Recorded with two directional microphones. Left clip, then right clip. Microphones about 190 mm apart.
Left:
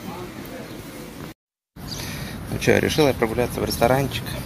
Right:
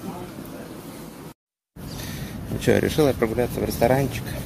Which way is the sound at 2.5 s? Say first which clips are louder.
Left 2 dB; 5° right (ahead or behind).